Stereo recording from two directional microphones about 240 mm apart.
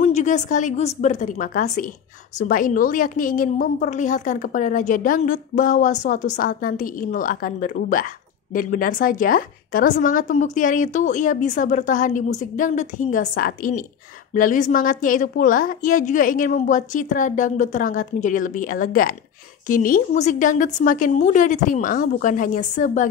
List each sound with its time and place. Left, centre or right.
0.0 s a woman's voice: left